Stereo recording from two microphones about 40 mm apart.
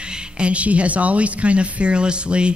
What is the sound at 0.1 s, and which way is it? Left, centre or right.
A man's voice, right.